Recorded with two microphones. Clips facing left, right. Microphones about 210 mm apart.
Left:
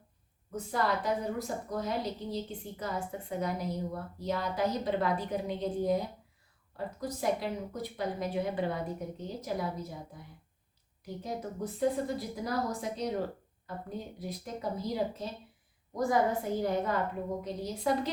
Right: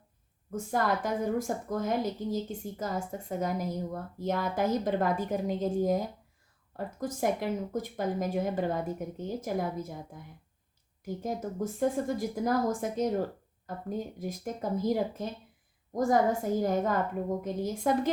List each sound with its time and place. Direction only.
0.5 s a woman's voice: 50° right (ahead or behind)
11.0 s a woman's voice: 45° right (ahead or behind)
14.2 s a woman's voice: 45° right (ahead or behind)